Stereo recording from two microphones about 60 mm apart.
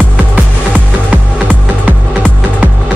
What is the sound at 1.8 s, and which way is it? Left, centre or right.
Music, right.